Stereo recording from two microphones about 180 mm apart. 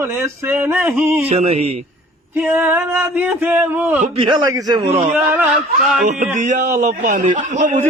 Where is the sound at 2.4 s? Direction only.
15° right (ahead or behind).